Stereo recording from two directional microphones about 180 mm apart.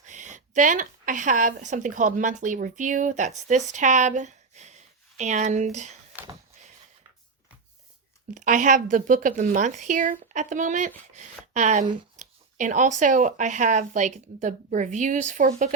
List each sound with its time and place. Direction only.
0.0 s a woman's voice: 45° right (ahead or behind)
8.3 s a woman's voice: 45° right (ahead or behind)